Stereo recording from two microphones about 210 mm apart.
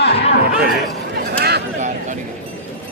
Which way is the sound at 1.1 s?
50° right (ahead or behind).